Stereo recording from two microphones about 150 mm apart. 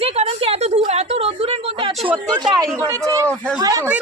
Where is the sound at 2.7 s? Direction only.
20° right (ahead or behind).